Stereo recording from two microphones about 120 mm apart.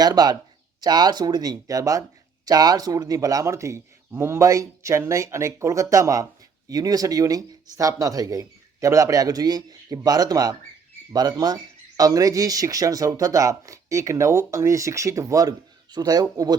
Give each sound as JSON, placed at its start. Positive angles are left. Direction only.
{"t": 0.0, "sound": "speech", "side_deg": -35}